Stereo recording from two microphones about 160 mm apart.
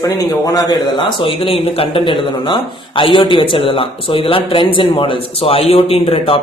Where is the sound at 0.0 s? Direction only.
20° left (ahead or behind).